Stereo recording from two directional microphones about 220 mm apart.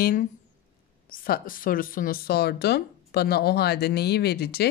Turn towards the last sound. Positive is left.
turn(degrees=45)  # may be behind; listen again after turning